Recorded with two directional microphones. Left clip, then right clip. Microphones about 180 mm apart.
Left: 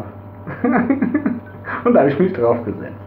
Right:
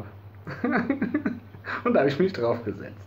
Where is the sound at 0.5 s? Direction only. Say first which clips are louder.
Left 9 dB; 20° right (ahead or behind).